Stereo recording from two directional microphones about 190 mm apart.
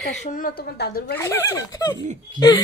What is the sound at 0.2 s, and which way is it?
Speech, 45° left (ahead or behind).